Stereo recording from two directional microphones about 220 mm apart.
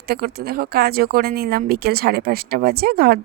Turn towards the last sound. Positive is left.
turn(degrees=-45)  # may be behind; listen again after turning